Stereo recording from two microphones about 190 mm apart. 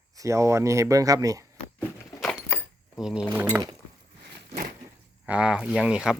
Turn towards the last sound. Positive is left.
turn(degrees=-5)  # may be behind; listen again after turning